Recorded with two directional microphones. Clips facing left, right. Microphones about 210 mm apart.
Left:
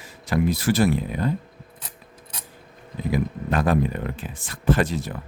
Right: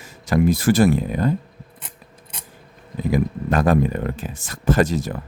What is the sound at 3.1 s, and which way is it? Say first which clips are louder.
Speech: right 3 dB; 45° right (ahead or behind).